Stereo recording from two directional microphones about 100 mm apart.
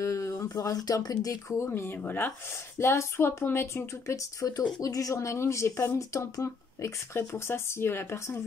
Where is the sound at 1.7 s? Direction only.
20° left (ahead or behind).